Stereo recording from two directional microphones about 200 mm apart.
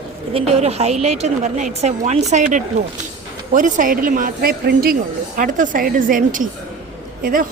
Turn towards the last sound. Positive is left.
turn(degrees=-45)  # may be behind; listen again after turning